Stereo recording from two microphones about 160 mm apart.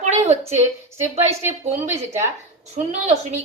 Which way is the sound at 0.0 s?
45° right (ahead or behind).